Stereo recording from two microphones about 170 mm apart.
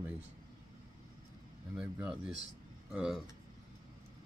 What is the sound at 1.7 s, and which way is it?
Speech, 5° right (ahead or behind).